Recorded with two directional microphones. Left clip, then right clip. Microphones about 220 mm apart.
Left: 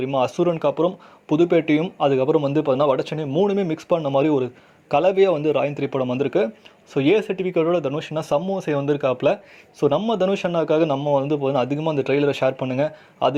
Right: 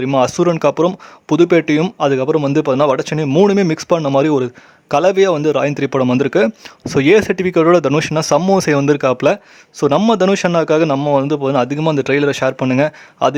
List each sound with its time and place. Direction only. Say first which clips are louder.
0.0 s speech: right 6 dB; 25° right (ahead or behind)